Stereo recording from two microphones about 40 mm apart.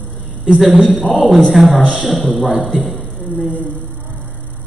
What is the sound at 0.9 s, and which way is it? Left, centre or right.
A man's voice, centre.